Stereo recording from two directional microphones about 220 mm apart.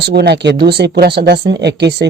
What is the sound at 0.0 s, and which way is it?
Speech, 50° right (ahead or behind).